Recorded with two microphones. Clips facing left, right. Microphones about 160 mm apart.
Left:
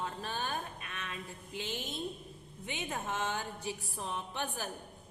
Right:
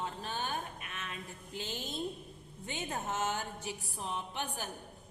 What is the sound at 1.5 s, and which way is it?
Speech, 20° left (ahead or behind).